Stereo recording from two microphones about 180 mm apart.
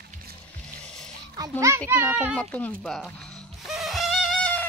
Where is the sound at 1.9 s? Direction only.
10° right (ahead or behind).